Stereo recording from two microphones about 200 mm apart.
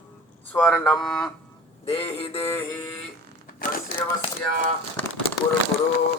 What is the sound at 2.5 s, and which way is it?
Synthetic singing, 10° left (ahead or behind).